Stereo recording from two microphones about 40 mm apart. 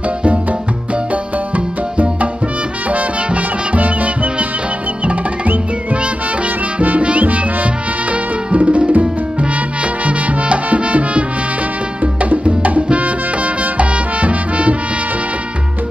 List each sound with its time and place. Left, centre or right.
0.2 s music: right
6.4 s music: right